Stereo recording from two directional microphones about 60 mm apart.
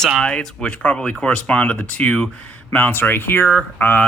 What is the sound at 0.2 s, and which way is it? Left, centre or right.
Speech, centre.